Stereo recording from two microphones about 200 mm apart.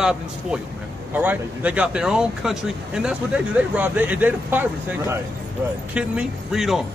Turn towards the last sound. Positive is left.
turn(degrees=0)  # may be behind; listen again after turning